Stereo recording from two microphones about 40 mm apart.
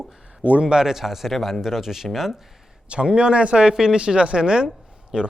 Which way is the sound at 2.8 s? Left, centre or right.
Right.